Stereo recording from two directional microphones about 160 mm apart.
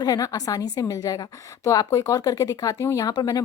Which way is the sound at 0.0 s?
25° left (ahead or behind).